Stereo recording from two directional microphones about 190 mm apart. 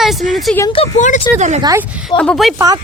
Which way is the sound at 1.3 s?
35° right (ahead or behind).